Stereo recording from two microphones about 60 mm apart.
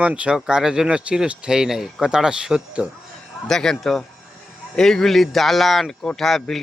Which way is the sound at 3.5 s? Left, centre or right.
Centre.